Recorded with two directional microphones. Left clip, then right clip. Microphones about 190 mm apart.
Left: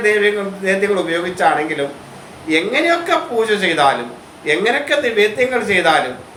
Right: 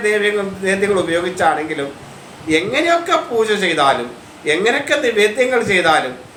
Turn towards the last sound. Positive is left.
turn(degrees=-15)  # may be behind; listen again after turning